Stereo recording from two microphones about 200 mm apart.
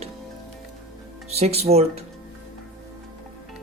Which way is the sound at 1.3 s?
30° right (ahead or behind).